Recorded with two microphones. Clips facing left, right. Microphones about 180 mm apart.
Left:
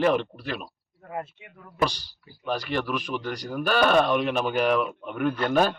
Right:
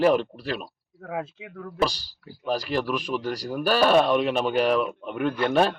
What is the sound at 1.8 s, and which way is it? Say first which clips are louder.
Speech: right 1 dB; 35° right (ahead or behind).